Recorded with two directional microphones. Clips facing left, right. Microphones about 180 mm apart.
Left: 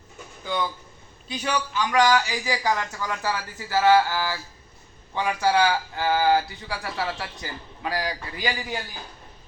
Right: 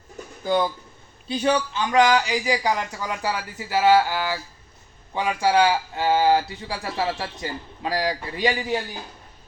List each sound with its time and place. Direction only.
0.4 s speech: 35° right (ahead or behind)